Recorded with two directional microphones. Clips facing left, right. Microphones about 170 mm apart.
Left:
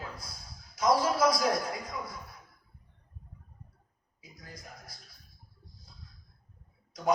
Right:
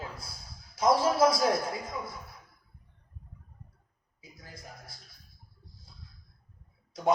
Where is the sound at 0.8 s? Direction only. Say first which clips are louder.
Right 2 dB; 25° right (ahead or behind).